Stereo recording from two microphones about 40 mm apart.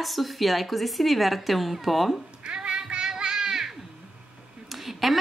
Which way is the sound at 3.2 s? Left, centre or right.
Centre.